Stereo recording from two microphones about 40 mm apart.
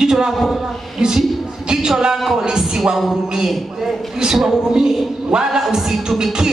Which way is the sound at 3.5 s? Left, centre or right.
Centre.